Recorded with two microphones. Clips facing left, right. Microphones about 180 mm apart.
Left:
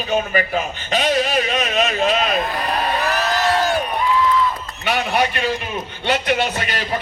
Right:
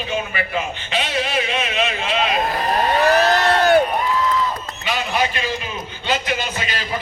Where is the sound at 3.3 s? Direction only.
65° right (ahead or behind).